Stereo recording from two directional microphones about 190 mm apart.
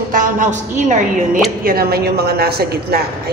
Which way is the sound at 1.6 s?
50° right (ahead or behind).